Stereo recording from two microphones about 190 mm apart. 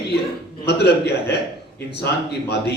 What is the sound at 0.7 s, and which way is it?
Speech, 60° left (ahead or behind).